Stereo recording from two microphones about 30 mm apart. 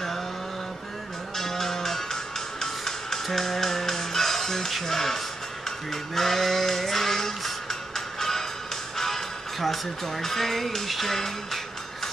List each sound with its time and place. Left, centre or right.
1.3 s cattle: centre
2.6 s music: centre
4.7 s speech: centre
5.9 s sheep: centre
8.9 s speech: centre